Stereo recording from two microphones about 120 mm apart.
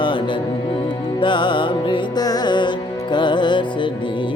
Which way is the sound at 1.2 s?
40° left (ahead or behind).